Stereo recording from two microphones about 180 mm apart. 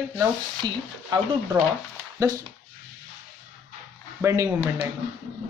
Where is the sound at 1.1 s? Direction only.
25° right (ahead or behind).